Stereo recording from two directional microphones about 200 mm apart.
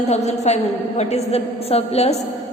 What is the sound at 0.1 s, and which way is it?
A woman's voice, 35° left (ahead or behind).